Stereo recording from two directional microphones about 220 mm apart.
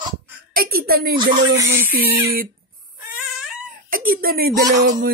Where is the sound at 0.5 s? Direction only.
45° right (ahead or behind).